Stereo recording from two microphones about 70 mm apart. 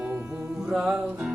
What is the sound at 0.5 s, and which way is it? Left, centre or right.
Music, centre.